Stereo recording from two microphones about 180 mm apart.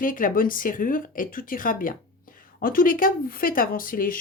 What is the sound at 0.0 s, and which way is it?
A woman's voice, 50° left (ahead or behind).